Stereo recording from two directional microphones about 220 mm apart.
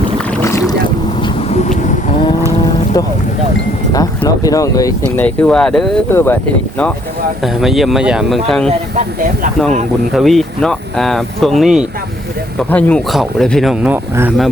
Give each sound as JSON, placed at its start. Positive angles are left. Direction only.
{"t": 0.3, "sound": "boat", "side_deg": 10}
{"t": 1.2, "sound": "a sound", "side_deg": 30}
{"t": 3.0, "sound": "speech", "side_deg": 15}
{"t": 9.0, "sound": "speech", "side_deg": -35}
{"t": 10.1, "sound": "speech", "side_deg": 0}